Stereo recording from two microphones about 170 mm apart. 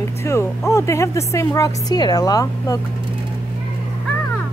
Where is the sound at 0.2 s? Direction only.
15° left (ahead or behind).